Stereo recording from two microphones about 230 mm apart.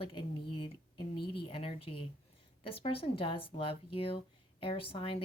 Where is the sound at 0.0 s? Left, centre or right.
Left.